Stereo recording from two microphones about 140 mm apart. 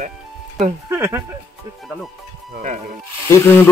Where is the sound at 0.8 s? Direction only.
20° right (ahead or behind).